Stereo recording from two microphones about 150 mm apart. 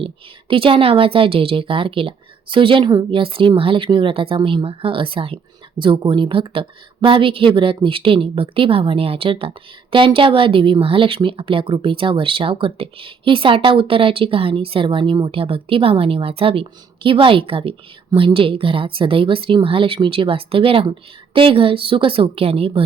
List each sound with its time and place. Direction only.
0.0 s speech: 35° right (ahead or behind)